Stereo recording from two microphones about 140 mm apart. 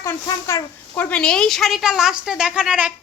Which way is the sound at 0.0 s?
20° left (ahead or behind).